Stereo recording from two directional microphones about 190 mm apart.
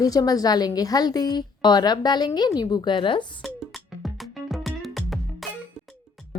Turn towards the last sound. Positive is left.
turn(degrees=0)  # may be behind; listen again after turning